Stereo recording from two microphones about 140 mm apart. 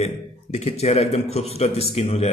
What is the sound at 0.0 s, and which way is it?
A man's voice, 50° left (ahead or behind).